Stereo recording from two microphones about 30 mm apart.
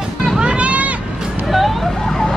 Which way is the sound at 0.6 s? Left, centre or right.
Right.